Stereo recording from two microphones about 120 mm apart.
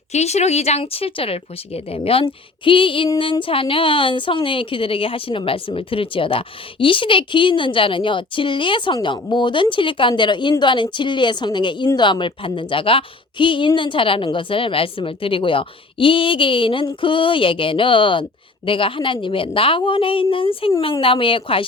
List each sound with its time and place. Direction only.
0.1 s a woman's voice: 65° left (ahead or behind); by 21.6 s 45° left (ahead or behind)